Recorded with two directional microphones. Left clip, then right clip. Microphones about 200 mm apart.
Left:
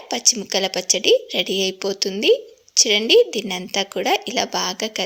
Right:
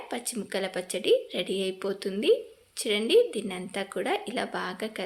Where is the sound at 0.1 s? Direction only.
30° left (ahead or behind).